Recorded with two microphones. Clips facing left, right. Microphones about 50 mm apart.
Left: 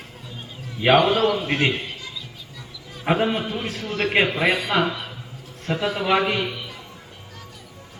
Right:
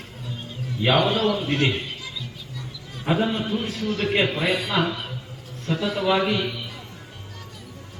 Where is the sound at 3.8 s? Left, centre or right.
Left.